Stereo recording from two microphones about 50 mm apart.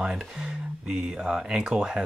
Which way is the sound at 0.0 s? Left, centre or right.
Centre.